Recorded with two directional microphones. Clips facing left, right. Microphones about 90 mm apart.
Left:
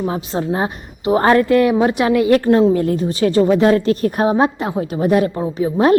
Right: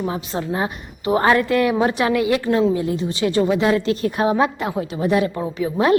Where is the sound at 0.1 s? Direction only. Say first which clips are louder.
Left 4 dB; 30° left (ahead or behind).